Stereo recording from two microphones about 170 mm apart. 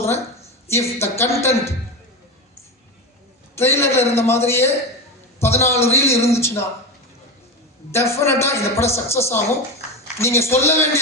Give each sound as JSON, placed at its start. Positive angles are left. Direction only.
{"t": 0.0, "sound": "a woman's voice", "side_deg": 15}
{"t": 3.5, "sound": "a man's voice", "side_deg": 15}
{"t": 7.9, "sound": "a man's voice", "side_deg": 15}